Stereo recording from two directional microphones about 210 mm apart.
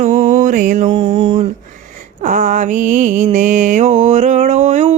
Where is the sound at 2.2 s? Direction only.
40° right (ahead or behind).